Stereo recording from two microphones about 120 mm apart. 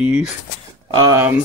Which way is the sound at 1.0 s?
30° right (ahead or behind).